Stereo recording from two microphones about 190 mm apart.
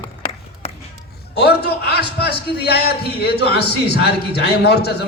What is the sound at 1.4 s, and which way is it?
A man's voice, 60° left (ahead or behind).